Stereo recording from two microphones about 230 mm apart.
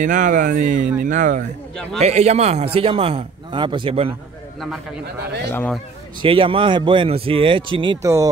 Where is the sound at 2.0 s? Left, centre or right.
Right.